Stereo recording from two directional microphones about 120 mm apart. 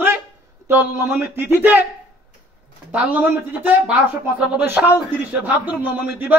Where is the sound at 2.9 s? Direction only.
15° right (ahead or behind).